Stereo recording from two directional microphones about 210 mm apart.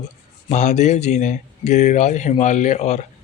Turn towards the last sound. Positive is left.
turn(degrees=35)  # may be behind; listen again after turning